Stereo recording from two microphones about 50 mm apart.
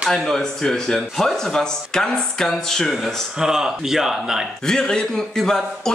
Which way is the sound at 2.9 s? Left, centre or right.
Centre.